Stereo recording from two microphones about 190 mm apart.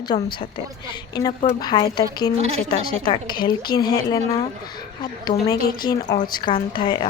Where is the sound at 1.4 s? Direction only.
25° left (ahead or behind).